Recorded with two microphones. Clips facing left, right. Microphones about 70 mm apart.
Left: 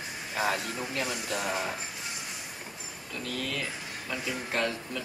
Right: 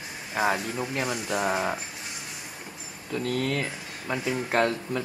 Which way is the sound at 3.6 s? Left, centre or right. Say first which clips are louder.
Right 3 dB; right.